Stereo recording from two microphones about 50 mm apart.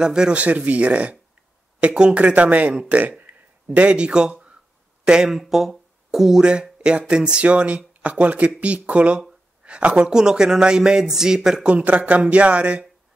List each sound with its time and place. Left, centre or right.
0.0 s speech: centre
0.4 s speech: right
3.0 s a sound: right
5.0 s speech: centre
11.6 s speech: right